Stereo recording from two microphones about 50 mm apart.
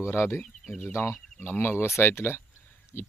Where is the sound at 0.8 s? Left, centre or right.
Left.